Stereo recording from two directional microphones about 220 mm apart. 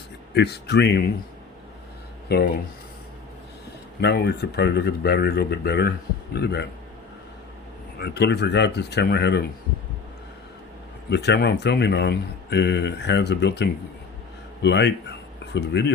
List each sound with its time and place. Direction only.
0.3 s speech: 50° left (ahead or behind)
2.3 s speech: 45° left (ahead or behind)
4.0 s speech: 45° left (ahead or behind)
7.9 s speech: 50° left (ahead or behind)
11.1 s speech: 50° left (ahead or behind)